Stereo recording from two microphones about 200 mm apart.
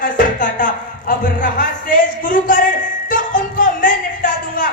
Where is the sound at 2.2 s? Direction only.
40° left (ahead or behind).